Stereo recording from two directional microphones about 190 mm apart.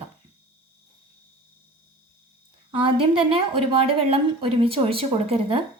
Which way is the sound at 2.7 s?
25° right (ahead or behind).